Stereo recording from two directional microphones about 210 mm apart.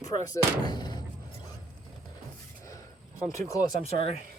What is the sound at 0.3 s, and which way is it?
Speech, 20° left (ahead or behind).